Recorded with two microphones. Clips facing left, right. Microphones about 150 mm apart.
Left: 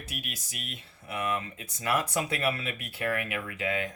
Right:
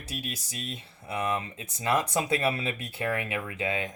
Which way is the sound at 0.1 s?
30° right (ahead or behind).